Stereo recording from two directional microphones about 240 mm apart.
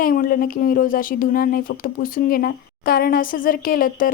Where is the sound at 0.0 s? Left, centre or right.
Left.